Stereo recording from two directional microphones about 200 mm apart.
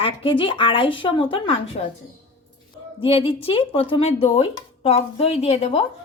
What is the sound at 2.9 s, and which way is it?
Speech, 30° left (ahead or behind).